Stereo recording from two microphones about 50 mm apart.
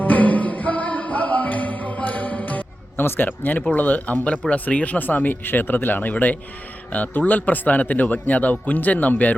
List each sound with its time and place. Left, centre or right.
0.0 s music: left
3.2 s speech: left